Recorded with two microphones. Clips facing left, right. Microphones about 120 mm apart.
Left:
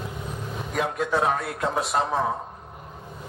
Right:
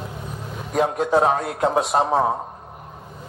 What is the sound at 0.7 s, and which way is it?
A man's voice, 35° right (ahead or behind).